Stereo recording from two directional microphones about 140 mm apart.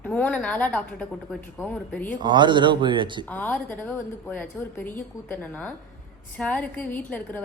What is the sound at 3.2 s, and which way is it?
A woman's voice, 10° left (ahead or behind).